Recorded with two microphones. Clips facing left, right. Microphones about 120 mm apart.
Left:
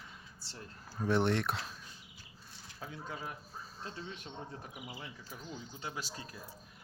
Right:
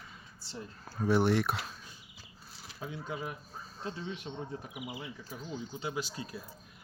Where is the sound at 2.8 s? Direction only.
20° right (ahead or behind).